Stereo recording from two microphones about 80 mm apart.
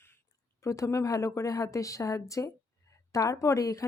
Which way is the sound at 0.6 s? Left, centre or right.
Left.